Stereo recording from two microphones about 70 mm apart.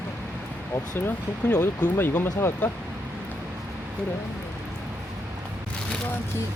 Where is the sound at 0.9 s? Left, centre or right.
Left.